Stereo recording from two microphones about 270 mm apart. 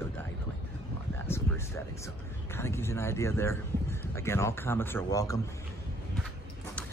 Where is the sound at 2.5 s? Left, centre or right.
Centre.